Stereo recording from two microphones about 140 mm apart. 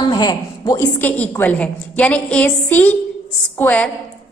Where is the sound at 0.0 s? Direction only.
30° left (ahead or behind).